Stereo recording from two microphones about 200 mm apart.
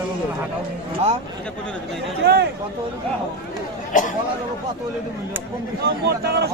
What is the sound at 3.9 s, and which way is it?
Chatter, 40° left (ahead or behind).